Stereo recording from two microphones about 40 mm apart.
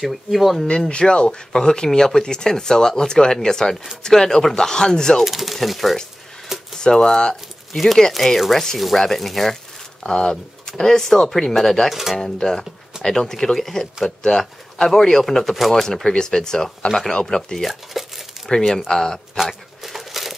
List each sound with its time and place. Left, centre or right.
0.0 s speech: centre
0.7 s speech: left
5.2 s speech: centre
6.8 s speech: centre
7.7 s speech: centre
11.9 s speech: centre
12.2 s speech: centre
17.6 s speech: centre
18.9 s speech: centre
19.3 s crumpling: centre